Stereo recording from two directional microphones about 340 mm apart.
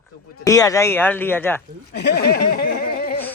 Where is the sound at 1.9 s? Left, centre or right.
Left.